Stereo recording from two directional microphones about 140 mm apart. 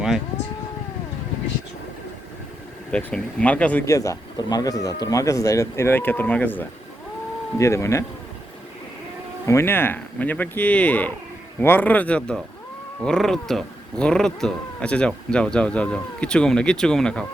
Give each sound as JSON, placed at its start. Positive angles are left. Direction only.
{"t": 2.9, "sound": "speech", "side_deg": 5}
{"t": 3.8, "sound": "speech", "side_deg": 20}
{"t": 9.5, "sound": "speech", "side_deg": 20}